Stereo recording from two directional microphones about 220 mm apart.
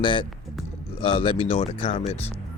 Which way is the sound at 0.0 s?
20° left (ahead or behind).